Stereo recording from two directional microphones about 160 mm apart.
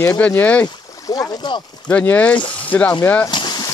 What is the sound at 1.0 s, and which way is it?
Speech, 25° left (ahead or behind).